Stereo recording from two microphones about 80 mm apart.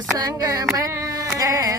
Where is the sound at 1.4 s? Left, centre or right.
Right.